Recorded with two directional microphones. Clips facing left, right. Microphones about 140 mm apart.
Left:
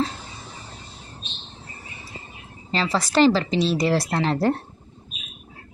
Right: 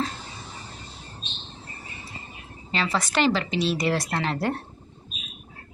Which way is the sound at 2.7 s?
35° left (ahead or behind).